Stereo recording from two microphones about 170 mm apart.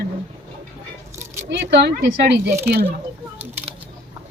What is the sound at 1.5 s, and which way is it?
Speech, 85° right.